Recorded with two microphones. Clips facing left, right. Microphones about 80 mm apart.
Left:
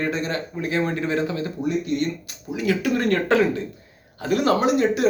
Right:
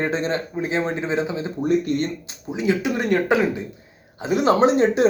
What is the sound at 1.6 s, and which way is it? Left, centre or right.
Speech, right.